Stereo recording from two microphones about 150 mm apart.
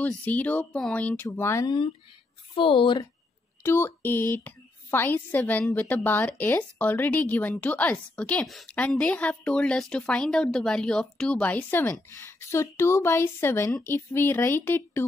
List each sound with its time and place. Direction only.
0.0 s a woman's voice: 10° left (ahead or behind)
1.7 s speech: 35° left (ahead or behind)
3.6 s a woman's voice: 15° left (ahead or behind)